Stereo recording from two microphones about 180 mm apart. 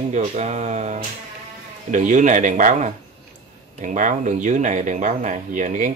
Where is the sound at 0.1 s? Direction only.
40° right (ahead or behind).